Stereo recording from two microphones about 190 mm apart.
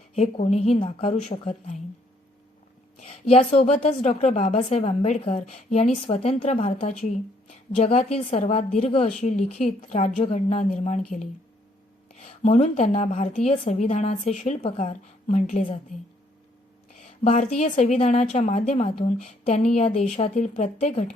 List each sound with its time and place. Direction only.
0.1 s a woman's voice: 35° left (ahead or behind)
3.0 s a woman's voice: 35° left (ahead or behind)
12.1 s a woman's voice: 35° left (ahead or behind)
16.9 s a sound: 35° left (ahead or behind)
17.6 s a woman's voice: 40° left (ahead or behind)